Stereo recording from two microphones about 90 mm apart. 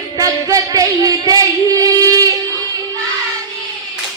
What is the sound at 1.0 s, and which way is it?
Female singing, 40° right (ahead or behind).